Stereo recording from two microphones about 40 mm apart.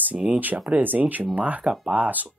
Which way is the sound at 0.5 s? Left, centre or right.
Right.